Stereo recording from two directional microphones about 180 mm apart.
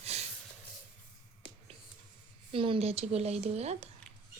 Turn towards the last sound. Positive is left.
turn(degrees=-35)  # may be behind; listen again after turning